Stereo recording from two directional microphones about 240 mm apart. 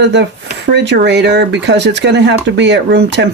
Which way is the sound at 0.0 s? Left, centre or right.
Right.